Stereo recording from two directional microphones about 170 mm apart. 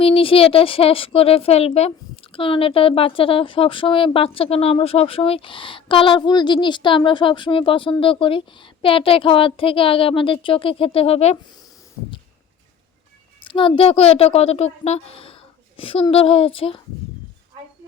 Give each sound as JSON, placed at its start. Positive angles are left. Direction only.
{"t": 0.0, "sound": "speech", "side_deg": 35}
{"t": 13.4, "sound": "speech", "side_deg": 30}